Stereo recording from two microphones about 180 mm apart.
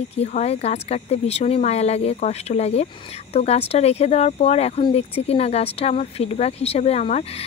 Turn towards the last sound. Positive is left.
turn(degrees=35)  # may be behind; listen again after turning